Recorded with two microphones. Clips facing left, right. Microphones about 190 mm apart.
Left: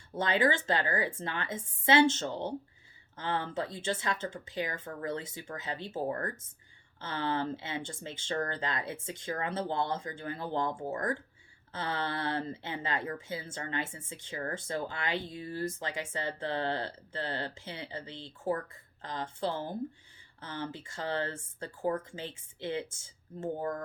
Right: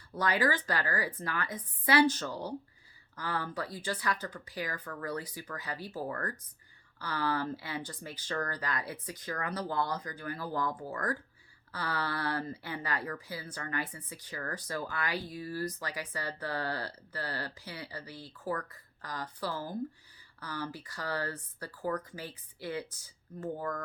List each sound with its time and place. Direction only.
0.1 s speech: 25° left (ahead or behind)